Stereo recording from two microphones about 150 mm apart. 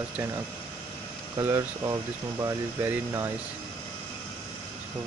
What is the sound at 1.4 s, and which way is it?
Speech, 20° right (ahead or behind).